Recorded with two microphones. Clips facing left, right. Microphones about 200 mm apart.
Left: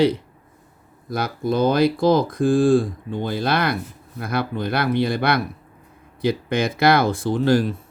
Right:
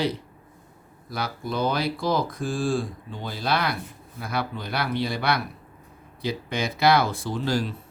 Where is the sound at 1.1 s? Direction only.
50° left (ahead or behind).